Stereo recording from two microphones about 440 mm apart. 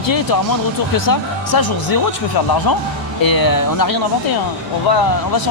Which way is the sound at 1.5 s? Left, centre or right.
Left.